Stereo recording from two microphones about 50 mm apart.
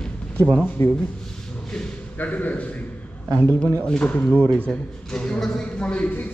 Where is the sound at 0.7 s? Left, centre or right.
Left.